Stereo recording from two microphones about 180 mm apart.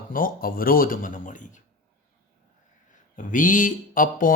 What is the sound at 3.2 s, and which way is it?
Speech, 45° left (ahead or behind).